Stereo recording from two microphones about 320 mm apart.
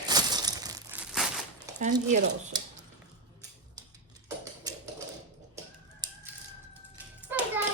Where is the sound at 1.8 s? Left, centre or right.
Right.